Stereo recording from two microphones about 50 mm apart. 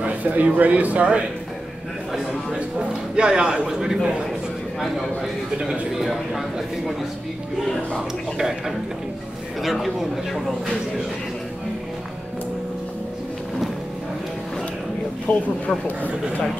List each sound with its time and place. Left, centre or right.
0.0 s a man's voice: right
2.5 s a sound: centre
3.6 s a man's voice: centre
8.4 s a man's voice: centre
15.3 s speech: left